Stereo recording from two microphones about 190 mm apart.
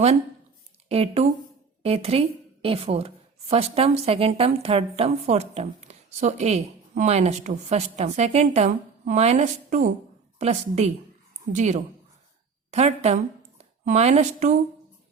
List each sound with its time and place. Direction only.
0.9 s a woman's voice: 30° right (ahead or behind)